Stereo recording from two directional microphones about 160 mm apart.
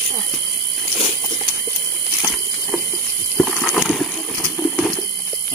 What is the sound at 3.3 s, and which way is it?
Horse, 10° left (ahead or behind).